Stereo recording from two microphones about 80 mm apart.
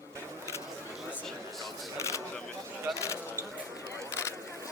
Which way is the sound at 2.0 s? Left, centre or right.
Left.